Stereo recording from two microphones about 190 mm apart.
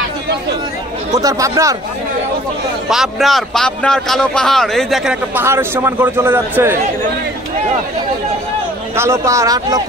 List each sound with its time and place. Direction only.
1.1 s speech: 20° right (ahead or behind)
2.9 s a man's voice: centre (ahead or behind)
8.9 s speech: 15° right (ahead or behind)